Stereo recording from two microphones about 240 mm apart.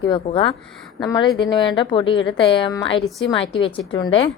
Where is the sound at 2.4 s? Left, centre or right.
Left.